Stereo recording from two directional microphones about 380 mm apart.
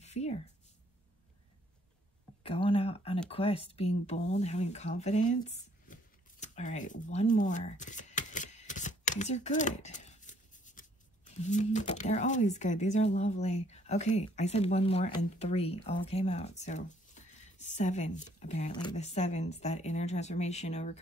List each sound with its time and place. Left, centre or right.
0.0 s a sound: centre
2.4 s speech: centre
6.4 s shuffling cards: centre
11.4 s speech: centre